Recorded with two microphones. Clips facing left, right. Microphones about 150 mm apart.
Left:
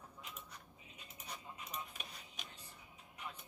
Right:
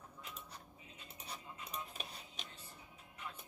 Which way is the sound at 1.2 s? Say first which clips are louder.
Even; 30° right (ahead or behind).